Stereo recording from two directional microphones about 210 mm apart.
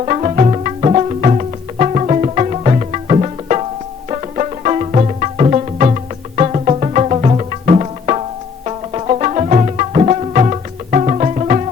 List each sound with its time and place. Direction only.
0.0 s music: 30° right (ahead or behind)